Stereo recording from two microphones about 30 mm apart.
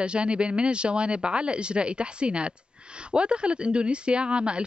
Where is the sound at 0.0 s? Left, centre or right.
Right.